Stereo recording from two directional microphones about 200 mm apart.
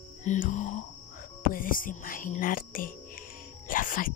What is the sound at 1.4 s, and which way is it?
Speech, 45° left (ahead or behind).